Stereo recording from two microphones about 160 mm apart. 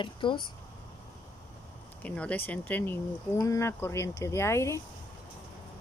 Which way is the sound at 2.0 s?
10° left (ahead or behind).